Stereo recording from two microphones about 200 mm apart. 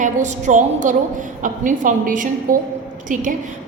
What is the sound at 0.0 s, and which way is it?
A woman's voice, 35° right (ahead or behind).